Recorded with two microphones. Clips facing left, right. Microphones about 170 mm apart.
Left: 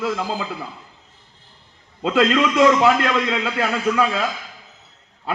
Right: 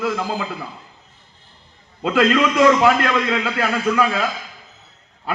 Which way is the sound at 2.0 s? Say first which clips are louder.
Right 1 dB; 20° left (ahead or behind).